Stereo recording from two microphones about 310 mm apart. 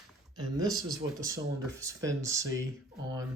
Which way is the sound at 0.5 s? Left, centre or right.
Centre.